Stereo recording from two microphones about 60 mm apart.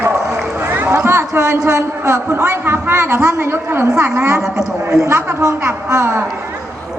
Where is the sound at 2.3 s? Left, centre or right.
Right.